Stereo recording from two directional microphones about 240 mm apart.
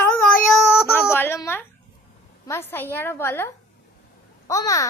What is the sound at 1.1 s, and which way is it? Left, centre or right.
A child's voice, centre.